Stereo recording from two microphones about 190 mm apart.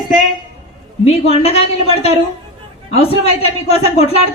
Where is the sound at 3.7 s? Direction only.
35° left (ahead or behind).